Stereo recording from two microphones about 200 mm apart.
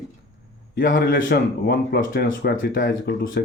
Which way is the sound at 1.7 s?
65° left (ahead or behind).